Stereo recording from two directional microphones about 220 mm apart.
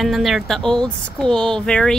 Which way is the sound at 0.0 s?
Centre (ahead or behind).